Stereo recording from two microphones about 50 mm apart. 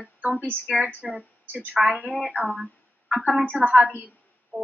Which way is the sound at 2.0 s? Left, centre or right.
Right.